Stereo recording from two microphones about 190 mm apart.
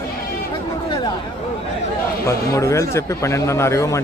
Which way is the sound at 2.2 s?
15° left (ahead or behind).